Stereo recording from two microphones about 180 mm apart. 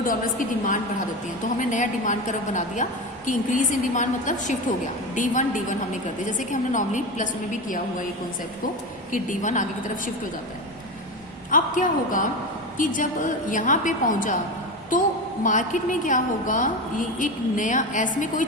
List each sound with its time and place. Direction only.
0.0 s a woman's voice: 50° left (ahead or behind)
9.1 s a woman's voice: 45° left (ahead or behind)
11.5 s a woman's voice: 45° left (ahead or behind)
15.4 s a woman's voice: 45° left (ahead or behind)